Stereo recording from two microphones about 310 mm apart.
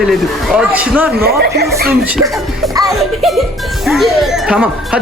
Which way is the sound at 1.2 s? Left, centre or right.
Right.